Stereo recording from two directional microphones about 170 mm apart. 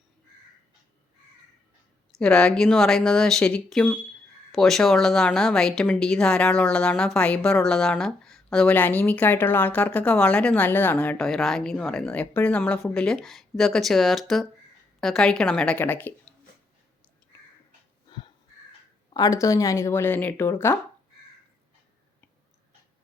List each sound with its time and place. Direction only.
2.1 s speech: 5° left (ahead or behind)
19.1 s speech: 20° left (ahead or behind)